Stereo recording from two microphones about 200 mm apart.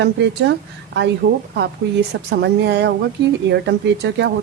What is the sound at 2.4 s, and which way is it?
Speech, 60° right (ahead or behind).